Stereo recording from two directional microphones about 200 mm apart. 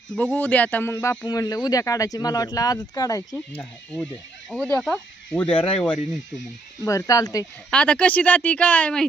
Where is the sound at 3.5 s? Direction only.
5° left (ahead or behind).